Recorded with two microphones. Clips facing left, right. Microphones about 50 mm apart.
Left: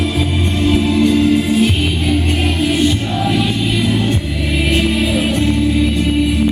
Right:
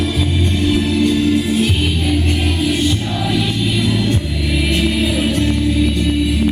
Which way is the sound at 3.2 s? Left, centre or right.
Left.